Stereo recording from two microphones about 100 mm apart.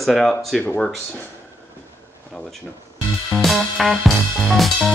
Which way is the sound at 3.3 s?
Centre (ahead or behind).